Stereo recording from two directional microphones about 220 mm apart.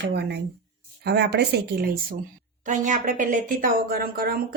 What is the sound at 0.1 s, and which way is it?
Speech, 50° right (ahead or behind).